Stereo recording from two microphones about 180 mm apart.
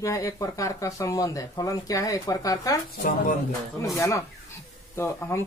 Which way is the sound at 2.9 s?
50° left (ahead or behind).